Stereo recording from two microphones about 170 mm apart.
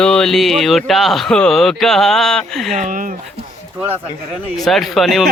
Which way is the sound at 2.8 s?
50° right (ahead or behind).